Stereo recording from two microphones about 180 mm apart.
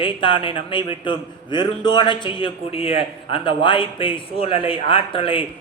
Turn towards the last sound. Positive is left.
turn(degrees=30)  # may be behind; listen again after turning